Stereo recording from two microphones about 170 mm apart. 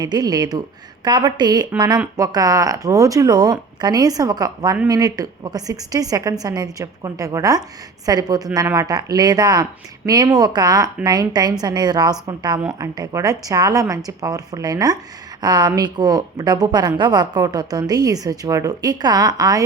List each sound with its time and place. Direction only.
0.0 s speech: 25° right (ahead or behind)